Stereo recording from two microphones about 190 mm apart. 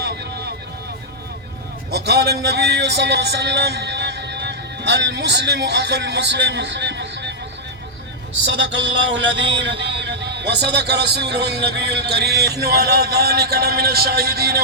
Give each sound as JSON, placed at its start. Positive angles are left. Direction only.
{"t": 1.9, "sound": "a man's voice", "side_deg": -60}
{"t": 8.5, "sound": "a man's voice", "side_deg": -65}